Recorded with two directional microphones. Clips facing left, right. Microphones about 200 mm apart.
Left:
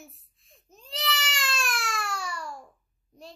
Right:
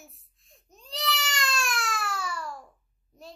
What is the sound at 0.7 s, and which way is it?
Baby cry, centre (ahead or behind).